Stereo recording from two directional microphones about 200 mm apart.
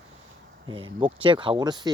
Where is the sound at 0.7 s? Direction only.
25° right (ahead or behind).